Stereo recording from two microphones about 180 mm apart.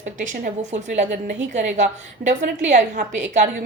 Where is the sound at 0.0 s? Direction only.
45° right (ahead or behind).